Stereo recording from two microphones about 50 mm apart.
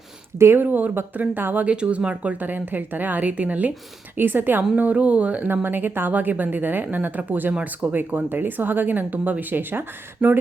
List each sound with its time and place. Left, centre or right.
0.3 s speech: right
1.6 s a woman's voice: right
4.2 s speech: right
4.7 s speech: right